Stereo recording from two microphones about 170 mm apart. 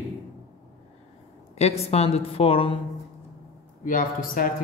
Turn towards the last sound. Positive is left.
turn(degrees=55)  # may be behind; listen again after turning